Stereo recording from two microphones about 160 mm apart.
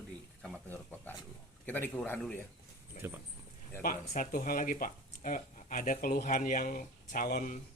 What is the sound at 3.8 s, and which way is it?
Speech, 60° left (ahead or behind).